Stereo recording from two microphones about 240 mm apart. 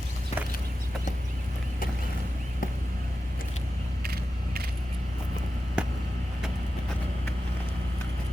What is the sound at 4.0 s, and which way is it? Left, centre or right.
Mechanisms, right.